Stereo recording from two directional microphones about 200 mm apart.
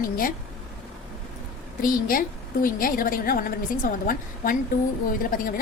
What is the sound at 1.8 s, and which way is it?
A woman's voice, 45° left (ahead or behind).